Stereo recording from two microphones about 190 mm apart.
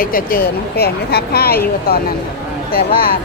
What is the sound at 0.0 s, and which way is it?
Speech, 50° left (ahead or behind).